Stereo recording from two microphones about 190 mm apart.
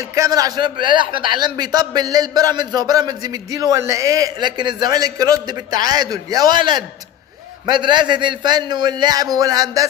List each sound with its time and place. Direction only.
0.1 s a man's voice: 15° right (ahead or behind)